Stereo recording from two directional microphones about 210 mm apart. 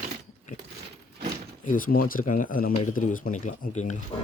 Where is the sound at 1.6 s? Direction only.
40° left (ahead or behind).